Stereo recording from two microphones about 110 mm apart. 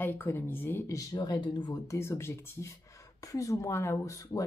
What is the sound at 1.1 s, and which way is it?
Speech, 40° left (ahead or behind).